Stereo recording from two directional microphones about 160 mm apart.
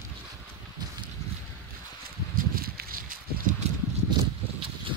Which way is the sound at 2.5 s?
70° right (ahead or behind).